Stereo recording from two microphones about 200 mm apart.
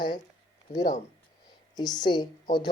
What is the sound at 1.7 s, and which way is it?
Speech, 20° left (ahead or behind).